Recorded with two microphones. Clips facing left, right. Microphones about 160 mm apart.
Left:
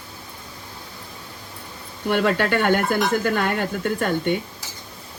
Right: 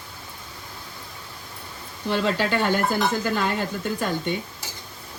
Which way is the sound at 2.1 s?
60° left (ahead or behind).